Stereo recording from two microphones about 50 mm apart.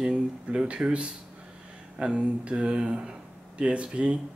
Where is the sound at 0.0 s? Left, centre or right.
Centre.